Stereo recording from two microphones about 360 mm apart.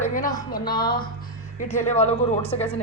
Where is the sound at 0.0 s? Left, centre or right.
Left.